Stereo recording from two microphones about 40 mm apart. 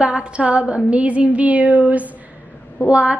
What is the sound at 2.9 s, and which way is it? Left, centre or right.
Speech, right.